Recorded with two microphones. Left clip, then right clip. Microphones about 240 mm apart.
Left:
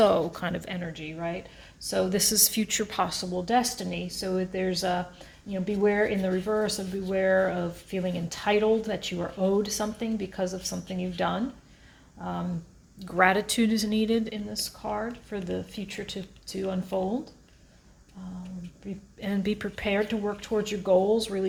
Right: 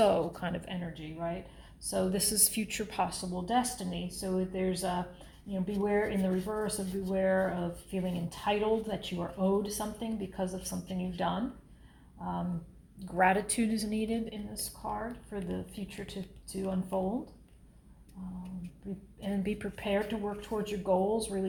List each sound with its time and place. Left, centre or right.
0.0 s speech: left
13.1 s speech: left
18.8 s speech: left